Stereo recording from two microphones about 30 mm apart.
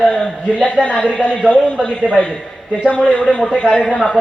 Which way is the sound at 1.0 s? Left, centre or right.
Left.